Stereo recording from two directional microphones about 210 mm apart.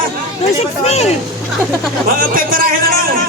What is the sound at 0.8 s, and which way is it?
Speech, 30° left (ahead or behind).